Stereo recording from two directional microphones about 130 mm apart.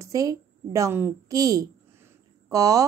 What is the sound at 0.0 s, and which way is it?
A woman's voice, 25° right (ahead or behind).